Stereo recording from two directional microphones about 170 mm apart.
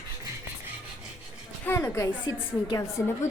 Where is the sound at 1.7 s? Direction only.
15° left (ahead or behind).